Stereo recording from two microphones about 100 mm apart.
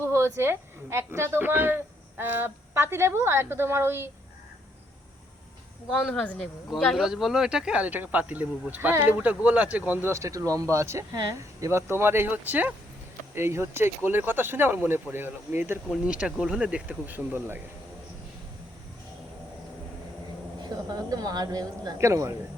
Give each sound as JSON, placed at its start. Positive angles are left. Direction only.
{"t": 0.0, "sound": "a woman's voice", "side_deg": -25}
{"t": 6.1, "sound": "speech", "side_deg": 10}
{"t": 15.9, "sound": "speech", "side_deg": -5}
{"t": 20.6, "sound": "speech", "side_deg": -40}